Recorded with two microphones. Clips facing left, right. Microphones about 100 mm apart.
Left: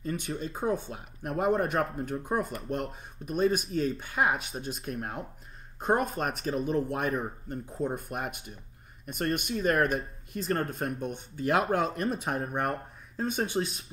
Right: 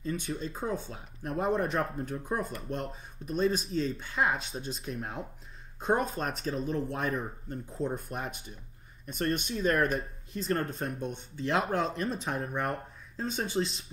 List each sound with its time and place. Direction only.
0.0 s speech: 55° left (ahead or behind)
0.3 s speech: 5° left (ahead or behind)